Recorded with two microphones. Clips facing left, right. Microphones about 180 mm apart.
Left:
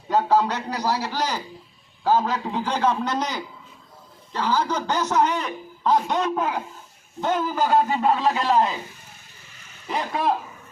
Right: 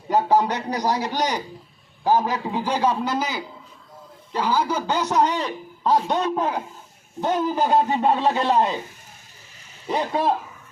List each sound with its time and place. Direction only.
0.1 s a man's voice: 15° right (ahead or behind)
5.3 s a man's voice: 30° right (ahead or behind)
7.2 s a man's voice: 15° right (ahead or behind)
9.8 s a man's voice: 30° right (ahead or behind)